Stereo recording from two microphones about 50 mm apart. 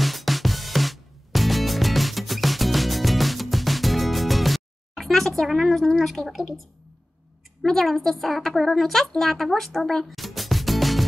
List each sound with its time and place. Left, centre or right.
0.0 s music: centre
7.6 s a woman's voice: centre
10.0 s music: centre